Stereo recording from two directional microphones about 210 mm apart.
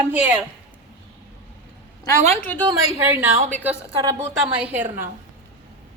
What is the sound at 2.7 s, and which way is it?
A woman's voice, 15° right (ahead or behind).